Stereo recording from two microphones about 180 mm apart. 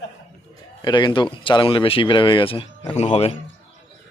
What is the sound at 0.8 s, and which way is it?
Speech, 25° left (ahead or behind).